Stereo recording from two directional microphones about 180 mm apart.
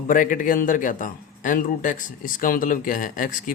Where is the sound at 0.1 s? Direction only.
50° left (ahead or behind).